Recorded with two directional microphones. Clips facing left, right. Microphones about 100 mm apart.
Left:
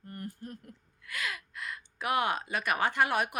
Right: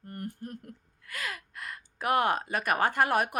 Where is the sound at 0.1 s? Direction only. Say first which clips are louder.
Right 3 dB; 55° right (ahead or behind).